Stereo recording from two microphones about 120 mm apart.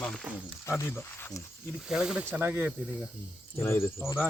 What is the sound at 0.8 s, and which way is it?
Speech, 25° left (ahead or behind).